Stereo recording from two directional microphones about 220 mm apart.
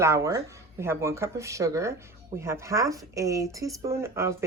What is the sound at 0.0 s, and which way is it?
A woman's voice, 15° right (ahead or behind).